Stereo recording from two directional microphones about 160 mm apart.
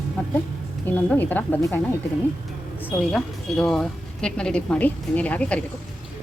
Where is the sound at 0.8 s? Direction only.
10° left (ahead or behind).